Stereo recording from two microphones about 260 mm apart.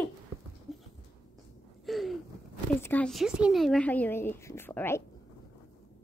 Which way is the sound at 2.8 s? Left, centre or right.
Centre.